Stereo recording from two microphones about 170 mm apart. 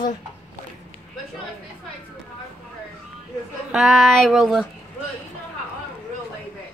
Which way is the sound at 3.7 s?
Centre (ahead or behind).